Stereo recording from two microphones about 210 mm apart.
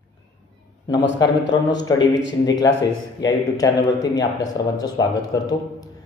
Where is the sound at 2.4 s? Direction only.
20° left (ahead or behind).